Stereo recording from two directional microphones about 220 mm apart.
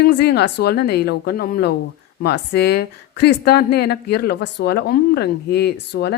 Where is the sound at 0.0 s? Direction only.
45° left (ahead or behind).